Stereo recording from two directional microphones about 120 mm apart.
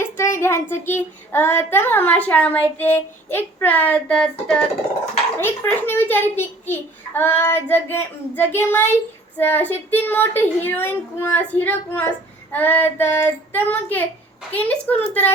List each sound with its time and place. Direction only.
0.0 s a child's voice: 20° left (ahead or behind)